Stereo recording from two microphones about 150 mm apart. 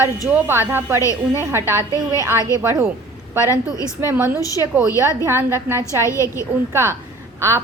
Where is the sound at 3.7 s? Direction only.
20° left (ahead or behind).